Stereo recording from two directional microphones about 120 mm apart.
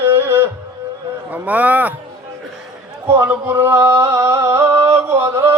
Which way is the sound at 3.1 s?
20° right (ahead or behind).